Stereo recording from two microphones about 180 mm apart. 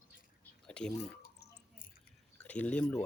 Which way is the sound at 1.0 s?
60° left (ahead or behind).